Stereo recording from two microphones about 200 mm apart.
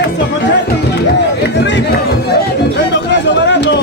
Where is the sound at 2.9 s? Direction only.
60° left (ahead or behind).